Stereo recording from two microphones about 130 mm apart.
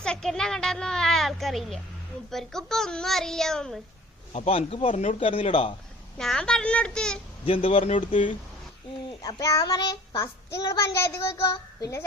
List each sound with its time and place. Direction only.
0.0 s a child's voice: 5° left (ahead or behind)
4.3 s speech: 50° left (ahead or behind)
4.9 s speech: 70° left (ahead or behind)
5.2 s speech: 45° left (ahead or behind)
6.1 s a child's voice: 5° left (ahead or behind)
7.4 s speech: 45° left (ahead or behind)
9.2 s a child's voice: 25° left (ahead or behind)